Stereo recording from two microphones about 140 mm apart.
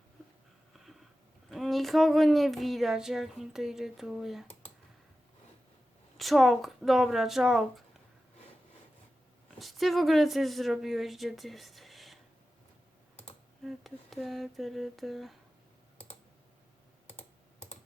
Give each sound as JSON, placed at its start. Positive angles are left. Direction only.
{"t": 0.7, "sound": "a sound", "side_deg": 0}
{"t": 1.5, "sound": "speech", "side_deg": 0}
{"t": 6.1, "sound": "speech", "side_deg": 0}
{"t": 9.6, "sound": "speech", "side_deg": 0}
{"t": 13.7, "sound": "speech", "side_deg": 0}
{"t": 17.1, "sound": "computer keyboard", "side_deg": 50}